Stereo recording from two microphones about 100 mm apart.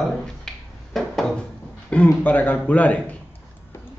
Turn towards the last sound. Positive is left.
turn(degrees=15)  # may be behind; listen again after turning